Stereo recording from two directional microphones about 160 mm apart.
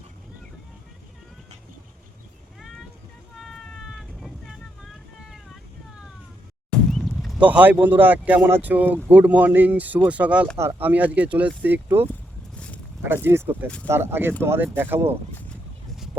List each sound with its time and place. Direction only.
2.6 s a sound: centre (ahead or behind)
3.3 s vehicle: centre (ahead or behind)
6.7 s speech: centre (ahead or behind)
12.5 s zipper: 5° left (ahead or behind)
13.2 s speech: 15° right (ahead or behind)